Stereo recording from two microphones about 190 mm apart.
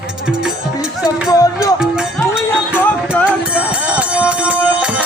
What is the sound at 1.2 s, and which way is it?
Music, 15° left (ahead or behind).